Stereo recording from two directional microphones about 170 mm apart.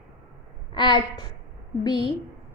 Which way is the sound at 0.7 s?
25° left (ahead or behind).